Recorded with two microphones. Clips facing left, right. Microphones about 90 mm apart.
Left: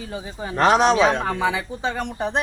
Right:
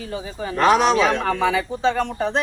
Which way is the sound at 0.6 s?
30° left (ahead or behind).